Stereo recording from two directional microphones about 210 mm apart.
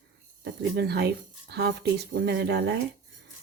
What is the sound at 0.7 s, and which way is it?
Speech, 50° right (ahead or behind).